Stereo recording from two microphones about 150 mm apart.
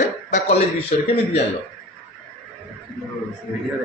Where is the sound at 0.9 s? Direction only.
40° left (ahead or behind).